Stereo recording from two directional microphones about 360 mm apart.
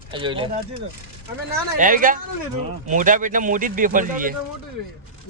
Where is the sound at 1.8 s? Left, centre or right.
Right.